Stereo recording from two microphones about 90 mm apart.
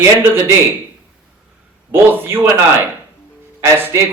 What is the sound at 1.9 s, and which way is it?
A man's voice, 25° right (ahead or behind).